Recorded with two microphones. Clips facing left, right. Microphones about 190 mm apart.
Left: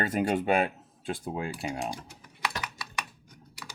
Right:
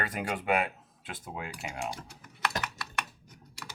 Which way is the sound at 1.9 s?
10° left (ahead or behind).